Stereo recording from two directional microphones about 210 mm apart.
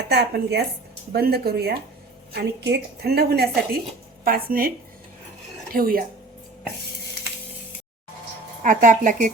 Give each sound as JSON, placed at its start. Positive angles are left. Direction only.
{"t": 0.1, "sound": "a woman's voice", "side_deg": -50}
{"t": 5.7, "sound": "a woman's voice", "side_deg": -45}
{"t": 8.6, "sound": "speech", "side_deg": -40}